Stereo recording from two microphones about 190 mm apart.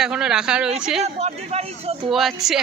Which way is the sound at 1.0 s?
35° right (ahead or behind).